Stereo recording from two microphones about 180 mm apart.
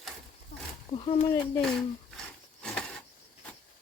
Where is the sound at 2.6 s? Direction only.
5° left (ahead or behind).